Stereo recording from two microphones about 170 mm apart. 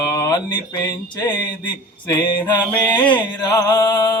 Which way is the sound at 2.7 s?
15° left (ahead or behind).